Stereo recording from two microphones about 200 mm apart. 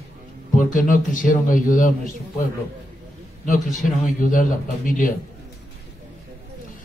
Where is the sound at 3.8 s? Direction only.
40° left (ahead or behind).